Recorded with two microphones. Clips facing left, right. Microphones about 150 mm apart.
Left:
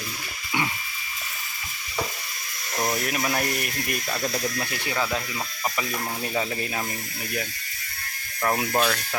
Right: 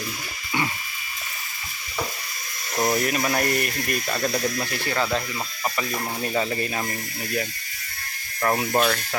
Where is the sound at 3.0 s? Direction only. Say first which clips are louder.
Right 3 dB; centre (ahead or behind).